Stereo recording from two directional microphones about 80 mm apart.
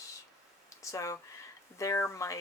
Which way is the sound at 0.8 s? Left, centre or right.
Left.